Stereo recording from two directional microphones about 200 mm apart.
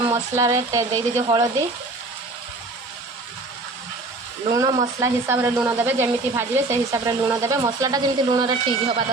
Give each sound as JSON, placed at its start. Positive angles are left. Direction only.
{"t": 0.1, "sound": "speech", "side_deg": -15}
{"t": 4.5, "sound": "speech", "side_deg": -15}